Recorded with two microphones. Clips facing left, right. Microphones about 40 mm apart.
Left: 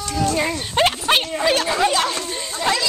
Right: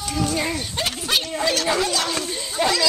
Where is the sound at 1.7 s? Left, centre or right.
Left.